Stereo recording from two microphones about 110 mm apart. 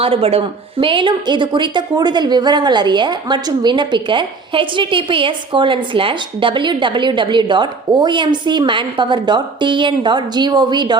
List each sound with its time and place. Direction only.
0.0 s a woman's voice: 60° right (ahead or behind); by 10.9 s 40° right (ahead or behind)